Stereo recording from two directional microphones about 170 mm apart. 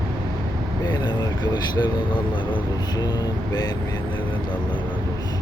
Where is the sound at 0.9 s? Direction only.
25° left (ahead or behind).